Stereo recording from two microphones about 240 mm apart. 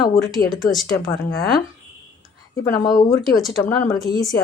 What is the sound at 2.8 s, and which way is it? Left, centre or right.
Speech, centre.